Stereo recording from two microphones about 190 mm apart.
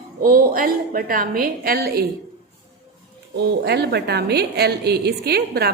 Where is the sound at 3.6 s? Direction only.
60° right (ahead or behind).